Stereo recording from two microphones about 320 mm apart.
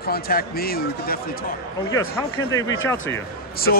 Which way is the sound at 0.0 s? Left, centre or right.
Left.